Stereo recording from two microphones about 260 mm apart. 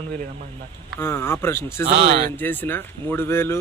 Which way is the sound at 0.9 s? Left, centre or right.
Centre.